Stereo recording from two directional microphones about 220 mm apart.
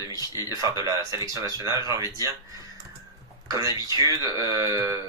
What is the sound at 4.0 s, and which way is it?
Speech, 15° right (ahead or behind).